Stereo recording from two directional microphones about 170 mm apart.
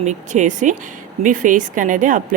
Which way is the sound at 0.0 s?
45° right (ahead or behind).